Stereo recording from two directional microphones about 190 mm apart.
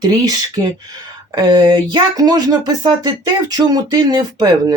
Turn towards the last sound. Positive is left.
turn(degrees=-20)  # may be behind; listen again after turning